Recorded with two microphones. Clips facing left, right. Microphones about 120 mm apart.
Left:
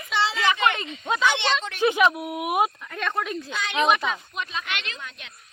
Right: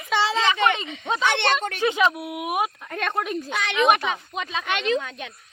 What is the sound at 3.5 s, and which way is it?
Speech, 70° right (ahead or behind).